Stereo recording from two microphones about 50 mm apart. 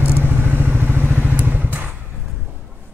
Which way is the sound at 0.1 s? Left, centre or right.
Right.